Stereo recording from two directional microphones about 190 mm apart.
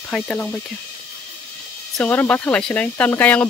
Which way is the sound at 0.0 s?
5° left (ahead or behind).